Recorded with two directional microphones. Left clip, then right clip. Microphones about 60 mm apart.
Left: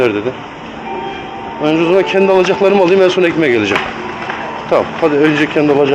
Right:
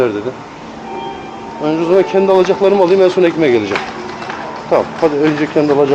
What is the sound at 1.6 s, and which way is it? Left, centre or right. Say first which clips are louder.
Speech: left 1 dB; left.